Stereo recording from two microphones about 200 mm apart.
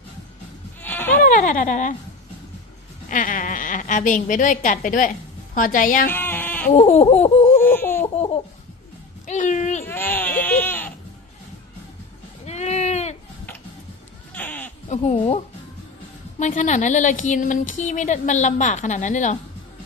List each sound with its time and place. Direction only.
0.8 s sheep: 10° left (ahead or behind)
1.2 s speech: 40° left (ahead or behind)
3.1 s a woman's voice: 40° left (ahead or behind)
6.1 s bleat: 10° left (ahead or behind)
6.7 s laughter: 35° left (ahead or behind)
7.6 s baby cry: 10° left (ahead or behind)
8.0 s laughter: 30° left (ahead or behind)
9.2 s speech: 40° left (ahead or behind)
9.8 s speech: 10° left (ahead or behind)
12.5 s sheep: 35° left (ahead or behind)
14.3 s bleat: 10° left (ahead or behind)
14.8 s speech: 35° left (ahead or behind)
16.4 s speech: 40° left (ahead or behind)